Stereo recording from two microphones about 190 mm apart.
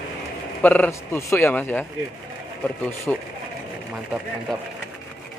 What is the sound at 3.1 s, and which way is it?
Speech, 5° left (ahead or behind).